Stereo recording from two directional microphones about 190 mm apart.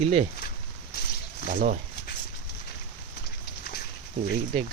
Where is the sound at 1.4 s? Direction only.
45° right (ahead or behind).